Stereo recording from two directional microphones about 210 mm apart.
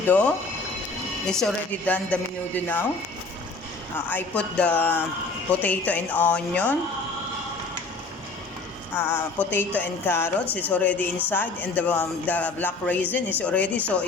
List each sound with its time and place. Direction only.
0.1 s speech: 5° left (ahead or behind)
4.1 s speech: 5° left (ahead or behind)
9.0 s speech: 10° left (ahead or behind)